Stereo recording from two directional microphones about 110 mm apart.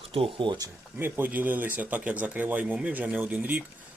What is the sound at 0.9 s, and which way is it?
Speech, 20° right (ahead or behind).